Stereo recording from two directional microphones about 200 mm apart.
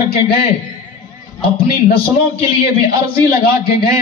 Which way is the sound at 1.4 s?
25° left (ahead or behind).